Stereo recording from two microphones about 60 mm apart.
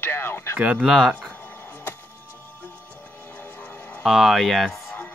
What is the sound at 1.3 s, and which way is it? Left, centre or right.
Music, left.